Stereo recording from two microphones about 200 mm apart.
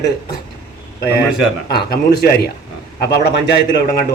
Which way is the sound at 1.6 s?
50° left (ahead or behind).